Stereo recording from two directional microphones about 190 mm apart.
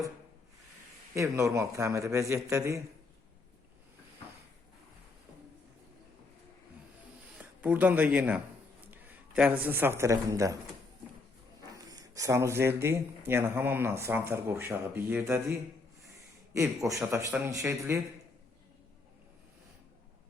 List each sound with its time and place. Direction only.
1.1 s speech: 15° right (ahead or behind)
7.3 s a man's voice: 10° right (ahead or behind)
11.8 s speech: 20° right (ahead or behind)
16.9 s speech: 15° right (ahead or behind)